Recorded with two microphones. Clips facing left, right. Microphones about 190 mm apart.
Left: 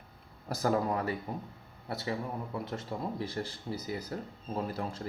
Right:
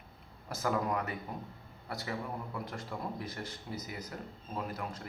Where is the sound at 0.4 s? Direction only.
35° left (ahead or behind).